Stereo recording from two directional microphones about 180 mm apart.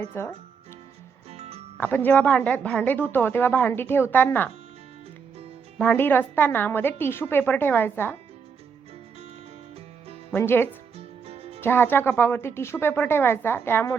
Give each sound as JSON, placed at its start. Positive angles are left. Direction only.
{"t": 0.1, "sound": "a woman's voice", "side_deg": 10}
{"t": 1.3, "sound": "music", "side_deg": -35}
{"t": 1.8, "sound": "a woman's voice", "side_deg": 10}
{"t": 5.7, "sound": "a woman's voice", "side_deg": 5}
{"t": 10.3, "sound": "a woman's voice", "side_deg": 10}
{"t": 10.9, "sound": "music", "side_deg": -35}
{"t": 11.6, "sound": "a woman's voice", "side_deg": 10}